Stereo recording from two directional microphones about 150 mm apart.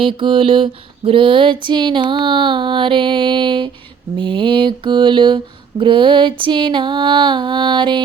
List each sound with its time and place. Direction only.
0.0 s mantra: 35° right (ahead or behind)